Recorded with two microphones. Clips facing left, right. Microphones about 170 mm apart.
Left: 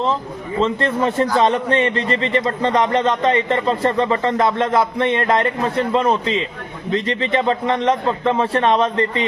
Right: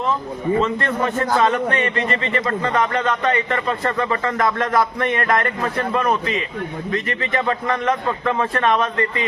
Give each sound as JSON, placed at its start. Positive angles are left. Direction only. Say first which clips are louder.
{"t": 0.6, "sound": "a man's voice", "louder": "left 3 dB", "side_deg": 30}